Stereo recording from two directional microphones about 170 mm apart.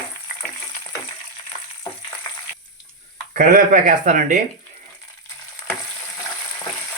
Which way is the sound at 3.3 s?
50° right (ahead or behind).